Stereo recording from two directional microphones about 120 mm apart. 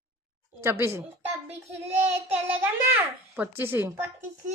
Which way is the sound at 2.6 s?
15° right (ahead or behind).